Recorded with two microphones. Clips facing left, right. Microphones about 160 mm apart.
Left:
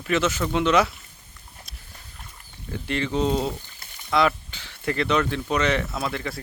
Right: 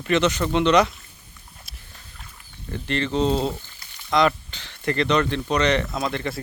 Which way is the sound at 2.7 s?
10° left (ahead or behind).